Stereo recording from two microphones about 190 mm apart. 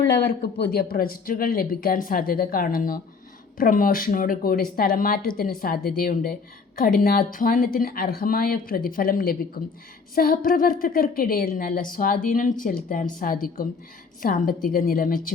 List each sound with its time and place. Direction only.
0.3 s a woman's voice: 50° left (ahead or behind)